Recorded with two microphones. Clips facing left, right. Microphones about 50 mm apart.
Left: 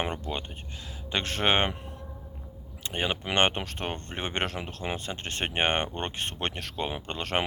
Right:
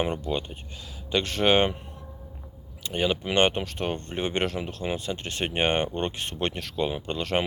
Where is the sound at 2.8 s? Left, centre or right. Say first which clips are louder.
Right 4 dB; left.